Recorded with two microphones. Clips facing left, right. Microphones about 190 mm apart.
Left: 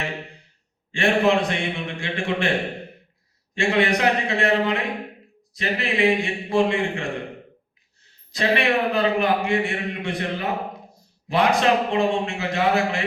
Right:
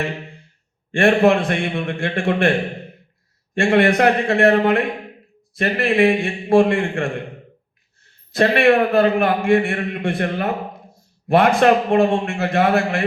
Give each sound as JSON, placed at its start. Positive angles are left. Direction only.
{"t": 0.9, "sound": "a man's voice", "side_deg": -55}
{"t": 3.5, "sound": "a man's voice", "side_deg": -55}
{"t": 8.3, "sound": "a man's voice", "side_deg": -55}